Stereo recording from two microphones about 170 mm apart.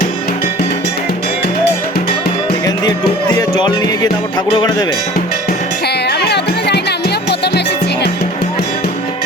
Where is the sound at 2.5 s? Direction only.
25° left (ahead or behind).